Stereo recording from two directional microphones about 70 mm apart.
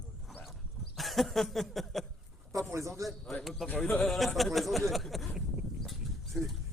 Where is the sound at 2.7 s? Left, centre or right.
Right.